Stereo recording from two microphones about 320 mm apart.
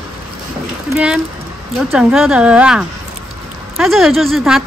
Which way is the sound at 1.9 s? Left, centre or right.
Centre.